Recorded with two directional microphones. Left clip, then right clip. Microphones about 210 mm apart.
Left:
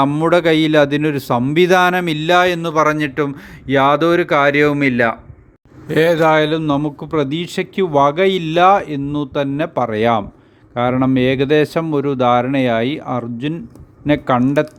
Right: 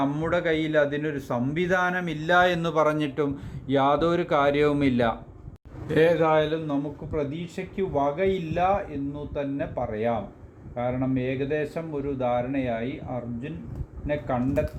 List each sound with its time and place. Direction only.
0.0 s a man's voice: 30° left (ahead or behind)
3.7 s speech: centre (ahead or behind)
5.9 s a man's voice: 25° left (ahead or behind); by 14.7 s 45° left (ahead or behind)